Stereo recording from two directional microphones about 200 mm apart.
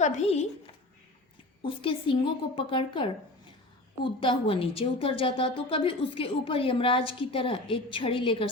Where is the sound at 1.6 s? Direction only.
25° left (ahead or behind).